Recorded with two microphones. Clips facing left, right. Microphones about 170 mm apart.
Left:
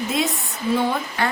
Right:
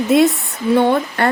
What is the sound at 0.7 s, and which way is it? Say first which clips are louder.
Speech: right 9 dB; 65° right (ahead or behind).